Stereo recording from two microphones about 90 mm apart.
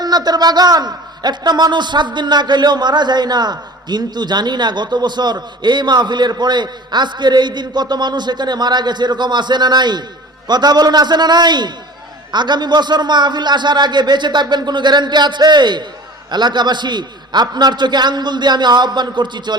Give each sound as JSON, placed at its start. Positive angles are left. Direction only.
{"t": 0.0, "sound": "a man's voice", "side_deg": -50}